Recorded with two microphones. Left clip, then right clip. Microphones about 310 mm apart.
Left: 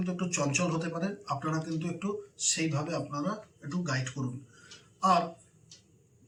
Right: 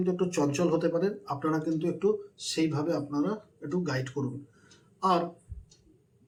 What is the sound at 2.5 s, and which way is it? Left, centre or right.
Speech, centre.